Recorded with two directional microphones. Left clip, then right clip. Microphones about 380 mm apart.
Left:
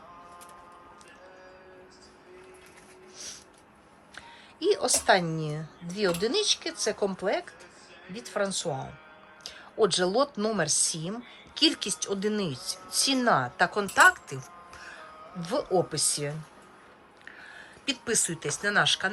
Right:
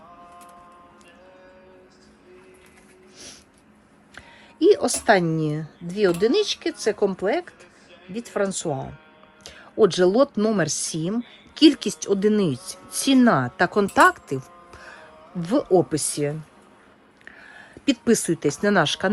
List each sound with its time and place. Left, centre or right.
4.6 s speech: centre
9.4 s music: centre
9.8 s speech: centre